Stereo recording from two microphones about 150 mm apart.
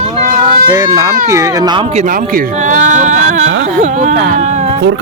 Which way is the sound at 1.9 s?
55° right (ahead or behind).